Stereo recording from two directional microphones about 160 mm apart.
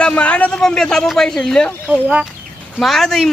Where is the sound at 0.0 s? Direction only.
5° left (ahead or behind).